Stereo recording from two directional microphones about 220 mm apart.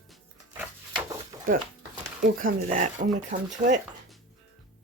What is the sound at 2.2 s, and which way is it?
Speech, 35° right (ahead or behind).